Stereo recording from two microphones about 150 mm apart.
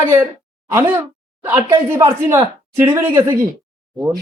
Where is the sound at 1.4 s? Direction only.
15° right (ahead or behind).